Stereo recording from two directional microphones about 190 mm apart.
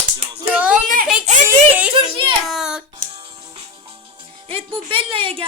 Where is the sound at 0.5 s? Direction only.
10° right (ahead or behind).